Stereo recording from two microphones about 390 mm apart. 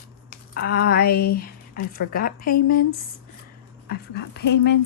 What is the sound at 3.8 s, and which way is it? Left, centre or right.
Speech, left.